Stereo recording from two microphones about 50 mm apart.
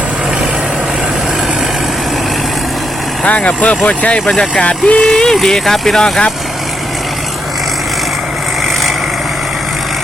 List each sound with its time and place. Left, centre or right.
3.2 s speech: left